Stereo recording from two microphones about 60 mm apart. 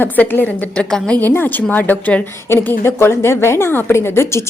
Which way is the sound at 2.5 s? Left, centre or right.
Left.